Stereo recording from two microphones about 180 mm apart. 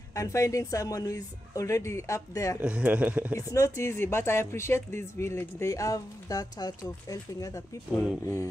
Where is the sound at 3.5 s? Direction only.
15° left (ahead or behind).